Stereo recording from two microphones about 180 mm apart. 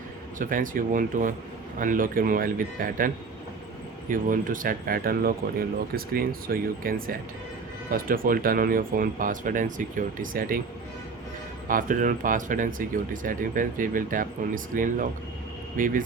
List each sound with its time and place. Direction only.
0.3 s speech: 50° right (ahead or behind)
4.1 s speech: 50° right (ahead or behind)
11.7 s speech: 50° right (ahead or behind)